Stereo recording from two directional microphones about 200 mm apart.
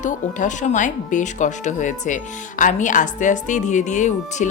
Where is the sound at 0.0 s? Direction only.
40° left (ahead or behind).